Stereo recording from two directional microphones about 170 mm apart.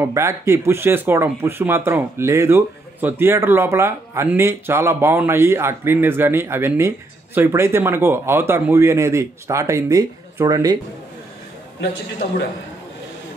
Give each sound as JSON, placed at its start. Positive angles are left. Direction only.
{"t": 0.0, "sound": "speech", "side_deg": -15}